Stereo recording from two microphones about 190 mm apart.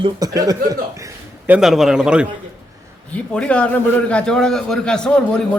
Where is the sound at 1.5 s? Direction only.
5° right (ahead or behind).